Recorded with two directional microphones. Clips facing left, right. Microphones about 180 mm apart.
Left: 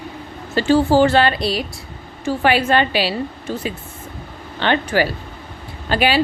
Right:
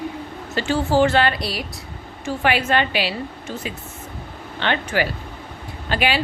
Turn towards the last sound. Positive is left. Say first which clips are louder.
# left 4 dB
turn(degrees=35)  # may be behind; listen again after turning